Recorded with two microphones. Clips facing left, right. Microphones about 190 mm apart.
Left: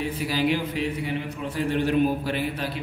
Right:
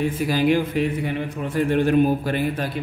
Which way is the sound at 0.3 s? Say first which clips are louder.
Right 5 dB; 50° right (ahead or behind).